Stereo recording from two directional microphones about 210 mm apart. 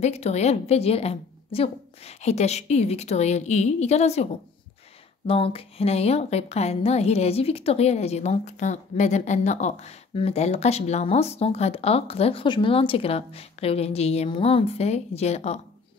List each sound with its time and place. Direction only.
0.0 s a woman's voice: 30° left (ahead or behind)